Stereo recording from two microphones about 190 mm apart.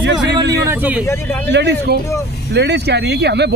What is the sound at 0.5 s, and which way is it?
Speech, 10° right (ahead or behind).